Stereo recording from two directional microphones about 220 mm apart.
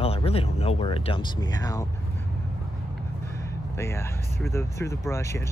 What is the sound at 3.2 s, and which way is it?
Speech, 10° left (ahead or behind).